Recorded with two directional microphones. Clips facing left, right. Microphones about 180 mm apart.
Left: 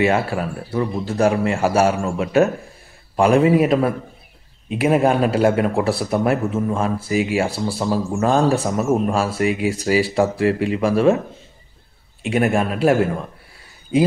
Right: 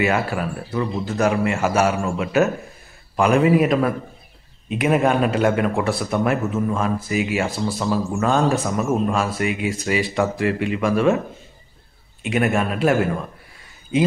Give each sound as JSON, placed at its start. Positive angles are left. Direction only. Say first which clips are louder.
{"t": 0.0, "sound": "a man's voice", "louder": "left 2 dB", "side_deg": 30}
{"t": 12.3, "sound": "a man's voice", "louder": "left 2 dB", "side_deg": 35}